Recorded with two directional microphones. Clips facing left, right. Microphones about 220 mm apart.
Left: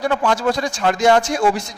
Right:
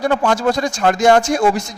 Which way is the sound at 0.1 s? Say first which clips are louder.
Right 2 dB; 45° right (ahead or behind).